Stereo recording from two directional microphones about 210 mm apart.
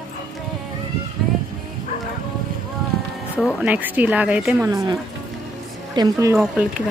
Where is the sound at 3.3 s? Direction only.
5° right (ahead or behind).